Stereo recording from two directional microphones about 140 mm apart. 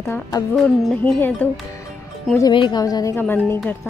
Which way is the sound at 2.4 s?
30° left (ahead or behind).